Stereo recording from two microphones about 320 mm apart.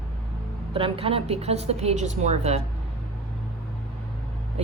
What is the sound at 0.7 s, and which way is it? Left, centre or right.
Speech, centre.